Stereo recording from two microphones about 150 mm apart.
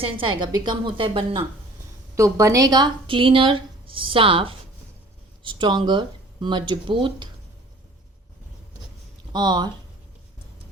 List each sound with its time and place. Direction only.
0.0 s speech: 35° right (ahead or behind)
2.1 s speech: 20° right (ahead or behind)
9.3 s speech: 30° right (ahead or behind)